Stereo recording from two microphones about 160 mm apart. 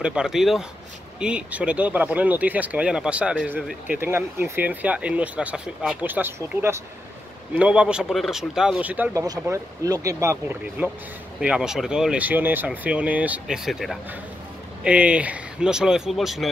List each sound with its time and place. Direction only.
0.0 s speech: 5° right (ahead or behind)
9.2 s speech: 25° right (ahead or behind)
11.3 s speech: 5° right (ahead or behind)